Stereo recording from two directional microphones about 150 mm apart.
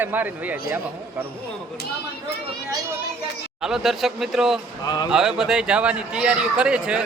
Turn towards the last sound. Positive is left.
turn(degrees=-5)  # may be behind; listen again after turning